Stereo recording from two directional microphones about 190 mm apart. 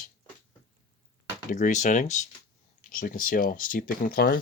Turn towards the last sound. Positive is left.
turn(degrees=50)  # may be behind; listen again after turning